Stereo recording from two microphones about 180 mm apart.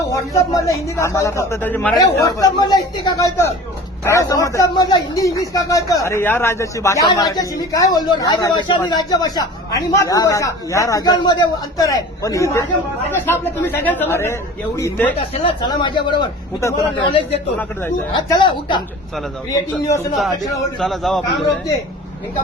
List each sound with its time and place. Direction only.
0.1 s speech: 15° left (ahead or behind)
2.0 s speech: 20° left (ahead or behind)
15.4 s speech: 30° left (ahead or behind)
20.7 s a man's voice: centre (ahead or behind)